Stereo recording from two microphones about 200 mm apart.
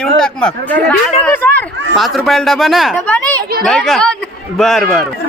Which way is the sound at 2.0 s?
Centre (ahead or behind).